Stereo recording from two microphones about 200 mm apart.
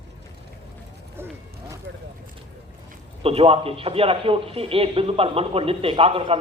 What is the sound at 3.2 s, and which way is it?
Speech, 30° right (ahead or behind).